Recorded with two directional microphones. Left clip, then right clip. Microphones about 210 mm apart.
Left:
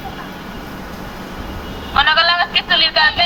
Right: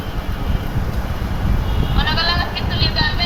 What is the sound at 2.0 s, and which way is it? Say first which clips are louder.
Sheep: left 7 dB; 35° left (ahead or behind).